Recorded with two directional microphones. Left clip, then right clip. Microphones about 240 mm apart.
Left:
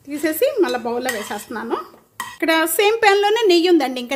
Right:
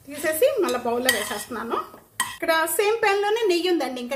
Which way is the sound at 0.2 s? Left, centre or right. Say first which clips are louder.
Left 3 dB; left.